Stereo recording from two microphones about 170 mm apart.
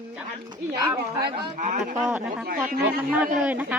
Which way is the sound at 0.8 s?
20° right (ahead or behind).